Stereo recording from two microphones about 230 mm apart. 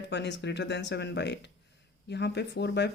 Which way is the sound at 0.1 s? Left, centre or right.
Left.